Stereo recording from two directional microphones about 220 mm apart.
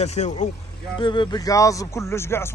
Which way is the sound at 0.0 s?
30° left (ahead or behind).